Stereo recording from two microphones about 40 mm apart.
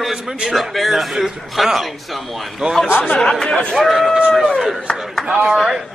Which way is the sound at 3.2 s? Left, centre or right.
Centre.